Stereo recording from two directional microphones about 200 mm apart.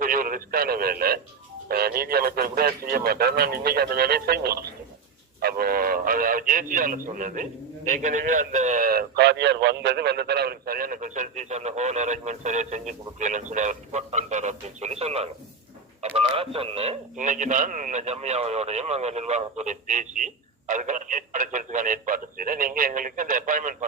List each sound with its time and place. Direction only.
0.0 s a man's voice: 45° right (ahead or behind)